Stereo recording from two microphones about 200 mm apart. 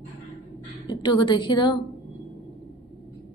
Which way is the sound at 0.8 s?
25° left (ahead or behind).